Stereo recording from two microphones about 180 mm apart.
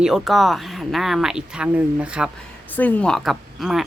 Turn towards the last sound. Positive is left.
turn(degrees=0)  # may be behind; listen again after turning